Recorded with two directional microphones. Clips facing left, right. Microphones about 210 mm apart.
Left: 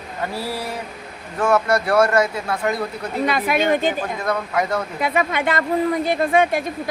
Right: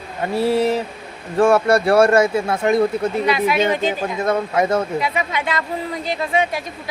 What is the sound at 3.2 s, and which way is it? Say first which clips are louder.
Speech: left 1 dB; 50° left (ahead or behind).